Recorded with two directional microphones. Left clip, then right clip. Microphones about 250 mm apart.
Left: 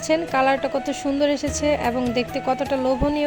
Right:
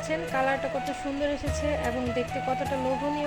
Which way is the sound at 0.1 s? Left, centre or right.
Left.